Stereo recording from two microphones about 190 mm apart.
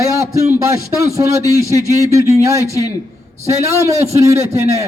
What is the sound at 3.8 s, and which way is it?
A man's voice, 15° right (ahead or behind).